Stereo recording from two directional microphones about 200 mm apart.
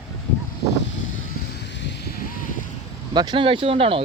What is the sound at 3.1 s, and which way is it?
Speech, 20° right (ahead or behind).